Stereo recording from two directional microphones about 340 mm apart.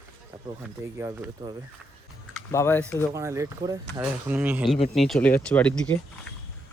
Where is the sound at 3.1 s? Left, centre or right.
Centre.